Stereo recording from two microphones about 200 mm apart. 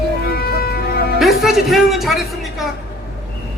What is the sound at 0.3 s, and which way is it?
Music, 50° left (ahead or behind).